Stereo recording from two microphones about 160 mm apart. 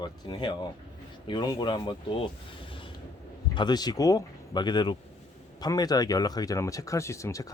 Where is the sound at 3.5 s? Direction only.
25° left (ahead or behind).